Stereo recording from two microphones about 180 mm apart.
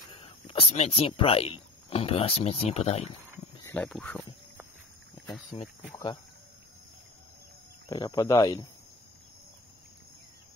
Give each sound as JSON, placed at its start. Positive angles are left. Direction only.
{"t": 0.1, "sound": "speech", "side_deg": 30}
{"t": 3.6, "sound": "speech", "side_deg": 5}
{"t": 7.9, "sound": "speech", "side_deg": 20}